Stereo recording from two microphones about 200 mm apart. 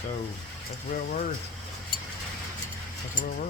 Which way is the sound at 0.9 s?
40° left (ahead or behind).